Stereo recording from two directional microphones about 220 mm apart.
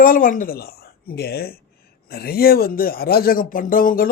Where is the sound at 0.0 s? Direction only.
40° left (ahead or behind).